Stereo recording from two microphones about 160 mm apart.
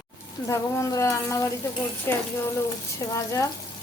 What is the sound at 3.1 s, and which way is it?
Speech, 20° left (ahead or behind).